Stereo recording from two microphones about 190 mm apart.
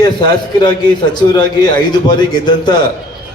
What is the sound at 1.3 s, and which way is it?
A man's voice, 20° left (ahead or behind).